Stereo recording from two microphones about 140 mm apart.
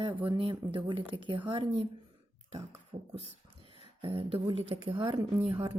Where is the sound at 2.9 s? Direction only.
55° right (ahead or behind).